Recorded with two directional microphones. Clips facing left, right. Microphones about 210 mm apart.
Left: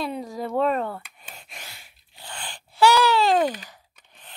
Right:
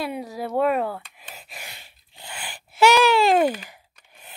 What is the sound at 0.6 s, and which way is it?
Speech, 10° right (ahead or behind).